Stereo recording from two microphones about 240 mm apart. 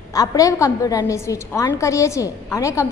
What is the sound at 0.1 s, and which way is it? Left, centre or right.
A woman's voice, centre.